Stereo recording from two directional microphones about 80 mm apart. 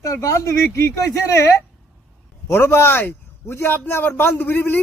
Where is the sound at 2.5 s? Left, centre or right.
Left.